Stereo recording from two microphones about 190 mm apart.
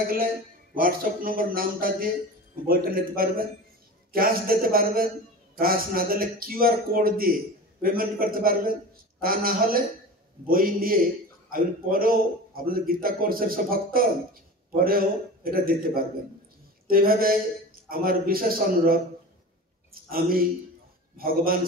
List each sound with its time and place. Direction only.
0.7 s a man's voice: 50° right (ahead or behind)